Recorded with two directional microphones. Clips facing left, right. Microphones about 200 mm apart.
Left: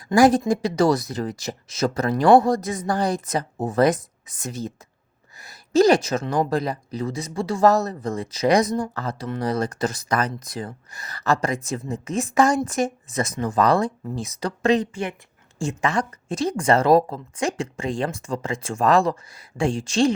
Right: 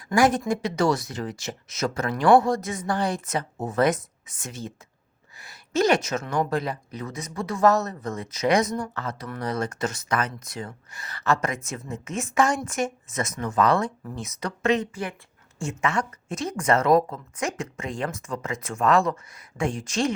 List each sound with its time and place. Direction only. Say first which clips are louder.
0.0 s speech: left 5 dB; 35° left (ahead or behind)